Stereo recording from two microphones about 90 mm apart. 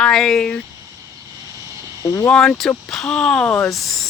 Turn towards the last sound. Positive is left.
turn(degrees=0)  # may be behind; listen again after turning